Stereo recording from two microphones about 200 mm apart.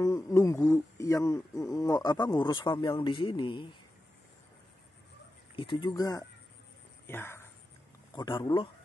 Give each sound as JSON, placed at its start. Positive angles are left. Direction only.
{"t": 0.0, "sound": "speech", "side_deg": 15}
{"t": 5.6, "sound": "speech", "side_deg": 25}